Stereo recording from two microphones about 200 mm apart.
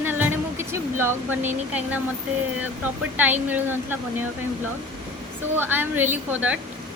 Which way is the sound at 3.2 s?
10° right (ahead or behind).